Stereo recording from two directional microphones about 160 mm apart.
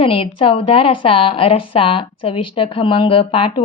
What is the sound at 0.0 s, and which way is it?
A woman's voice, 35° left (ahead or behind).